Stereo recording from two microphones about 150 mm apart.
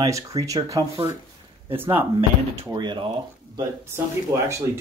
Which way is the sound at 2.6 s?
30° right (ahead or behind).